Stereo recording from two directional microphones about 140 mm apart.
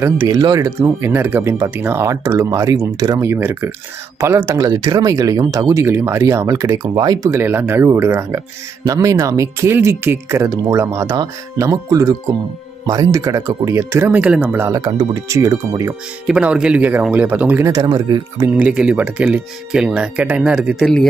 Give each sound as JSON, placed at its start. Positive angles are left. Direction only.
{"t": 0.0, "sound": "speech", "side_deg": -20}
{"t": 7.3, "sound": "speech", "side_deg": -15}
{"t": 16.3, "sound": "speech", "side_deg": -10}
{"t": 17.6, "sound": "speech", "side_deg": -25}
{"t": 18.6, "sound": "speech", "side_deg": -10}